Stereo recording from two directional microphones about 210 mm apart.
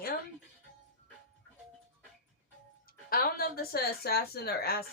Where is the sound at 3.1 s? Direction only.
45° left (ahead or behind).